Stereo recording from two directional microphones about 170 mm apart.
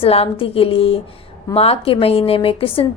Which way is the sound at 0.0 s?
35° left (ahead or behind).